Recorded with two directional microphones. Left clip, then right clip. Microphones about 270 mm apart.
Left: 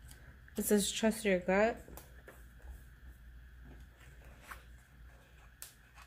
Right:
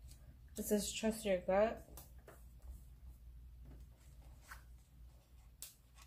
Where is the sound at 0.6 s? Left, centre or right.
Left.